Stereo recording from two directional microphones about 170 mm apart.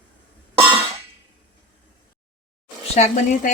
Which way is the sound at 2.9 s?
40° left (ahead or behind).